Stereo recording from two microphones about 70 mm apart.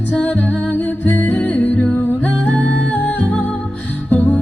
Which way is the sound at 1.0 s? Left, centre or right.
Left.